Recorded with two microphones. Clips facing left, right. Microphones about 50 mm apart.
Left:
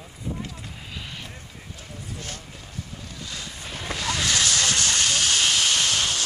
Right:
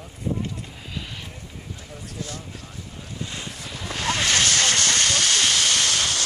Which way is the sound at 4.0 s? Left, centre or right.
Right.